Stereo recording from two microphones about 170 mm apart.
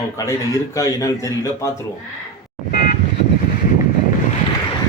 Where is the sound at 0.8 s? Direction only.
20° left (ahead or behind).